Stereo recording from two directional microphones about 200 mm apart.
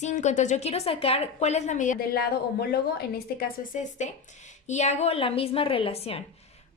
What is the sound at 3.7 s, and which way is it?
A woman's voice, 35° left (ahead or behind).